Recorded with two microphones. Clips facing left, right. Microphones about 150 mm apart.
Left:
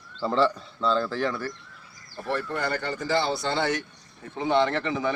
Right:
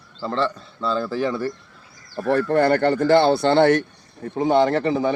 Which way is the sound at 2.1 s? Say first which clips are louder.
Right 10 dB; 65° right (ahead or behind).